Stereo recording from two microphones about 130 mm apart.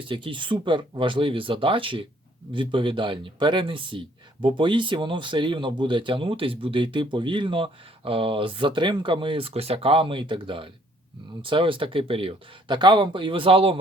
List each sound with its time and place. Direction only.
0.1 s speech: 40° right (ahead or behind)